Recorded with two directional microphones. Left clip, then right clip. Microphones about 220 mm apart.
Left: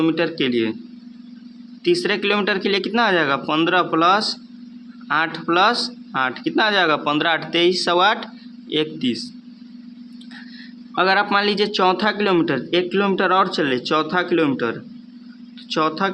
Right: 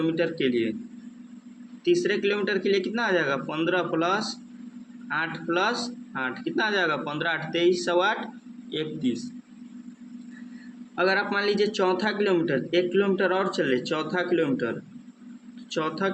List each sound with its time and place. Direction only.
0.0 s a man's voice: 40° left (ahead or behind)
2.0 s a man's voice: 40° left (ahead or behind)
10.9 s a man's voice: 40° left (ahead or behind)